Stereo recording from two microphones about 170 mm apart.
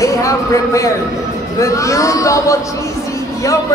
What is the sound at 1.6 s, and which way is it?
Speech, 20° left (ahead or behind).